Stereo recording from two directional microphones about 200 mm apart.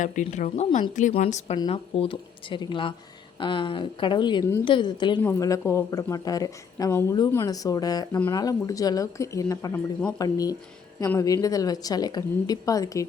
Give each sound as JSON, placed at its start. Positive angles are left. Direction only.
{"t": 0.0, "sound": "a woman's voice", "side_deg": 40}